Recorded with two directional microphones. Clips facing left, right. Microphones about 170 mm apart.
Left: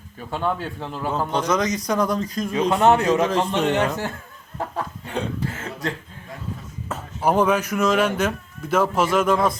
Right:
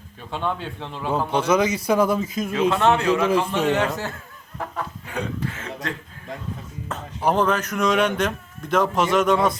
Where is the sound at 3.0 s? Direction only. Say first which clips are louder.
Left 1 dB; 15° left (ahead or behind).